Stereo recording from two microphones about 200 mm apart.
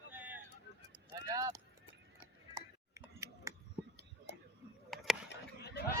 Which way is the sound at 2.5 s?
15° right (ahead or behind).